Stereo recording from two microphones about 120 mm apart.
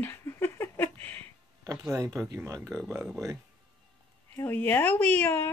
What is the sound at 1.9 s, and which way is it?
Speech, 25° right (ahead or behind).